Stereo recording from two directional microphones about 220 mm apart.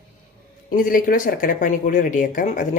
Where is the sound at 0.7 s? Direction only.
40° left (ahead or behind).